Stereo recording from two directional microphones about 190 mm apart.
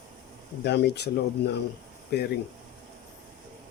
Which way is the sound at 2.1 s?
60° left (ahead or behind).